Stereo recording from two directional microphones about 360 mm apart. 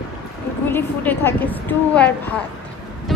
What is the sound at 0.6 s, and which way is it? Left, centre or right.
A woman's voice, centre.